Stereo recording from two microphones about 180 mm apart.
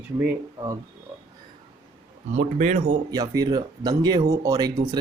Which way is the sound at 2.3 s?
40° right (ahead or behind).